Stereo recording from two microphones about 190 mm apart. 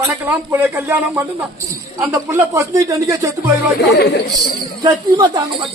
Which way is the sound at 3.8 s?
60° left (ahead or behind).